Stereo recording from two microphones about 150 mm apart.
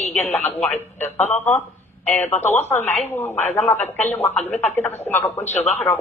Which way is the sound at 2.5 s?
15° left (ahead or behind).